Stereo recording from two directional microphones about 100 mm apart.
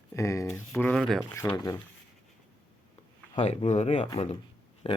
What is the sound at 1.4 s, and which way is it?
Speech, 25° left (ahead or behind).